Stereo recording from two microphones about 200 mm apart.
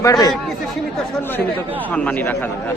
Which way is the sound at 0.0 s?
20° left (ahead or behind).